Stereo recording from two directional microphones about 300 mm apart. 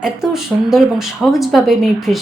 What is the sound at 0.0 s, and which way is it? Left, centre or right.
A woman's voice, centre.